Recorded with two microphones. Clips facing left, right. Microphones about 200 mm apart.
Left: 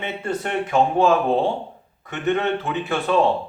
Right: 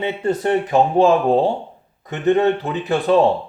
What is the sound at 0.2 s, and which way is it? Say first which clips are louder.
A man's voice: right 6 dB; 35° right (ahead or behind).